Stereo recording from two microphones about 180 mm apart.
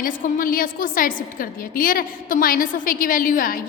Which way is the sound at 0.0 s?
50° left (ahead or behind).